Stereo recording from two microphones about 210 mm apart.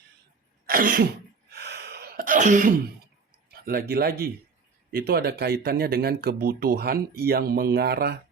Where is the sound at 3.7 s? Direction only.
45° right (ahead or behind).